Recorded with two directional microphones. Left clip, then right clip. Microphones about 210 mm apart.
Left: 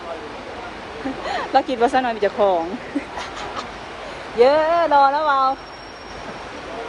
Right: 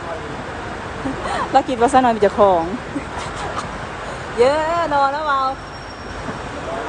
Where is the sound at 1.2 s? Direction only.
15° right (ahead or behind).